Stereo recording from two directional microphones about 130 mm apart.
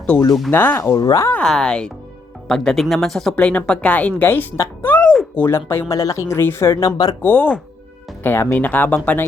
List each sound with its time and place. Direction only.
0.5 s speech: 15° left (ahead or behind)
1.3 s speech: 5° left (ahead or behind); by 7.2 s 30° left (ahead or behind)
7.2 s speech: 15° left (ahead or behind)